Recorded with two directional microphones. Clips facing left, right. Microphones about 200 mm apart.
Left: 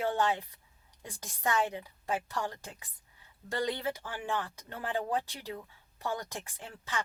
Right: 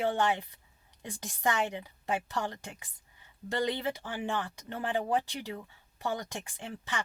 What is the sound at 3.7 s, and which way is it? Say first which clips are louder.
Speech: right 2 dB; 15° right (ahead or behind).